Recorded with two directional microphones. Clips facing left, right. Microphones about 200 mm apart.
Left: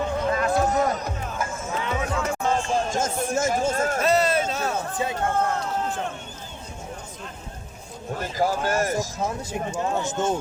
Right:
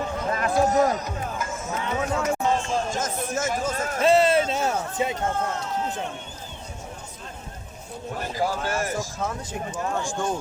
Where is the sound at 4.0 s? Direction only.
25° right (ahead or behind).